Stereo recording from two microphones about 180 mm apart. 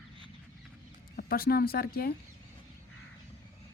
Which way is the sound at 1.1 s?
55° left (ahead or behind).